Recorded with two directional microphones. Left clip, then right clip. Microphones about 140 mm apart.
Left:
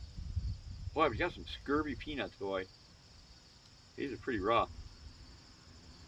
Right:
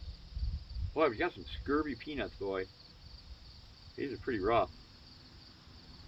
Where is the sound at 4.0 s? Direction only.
25° left (ahead or behind).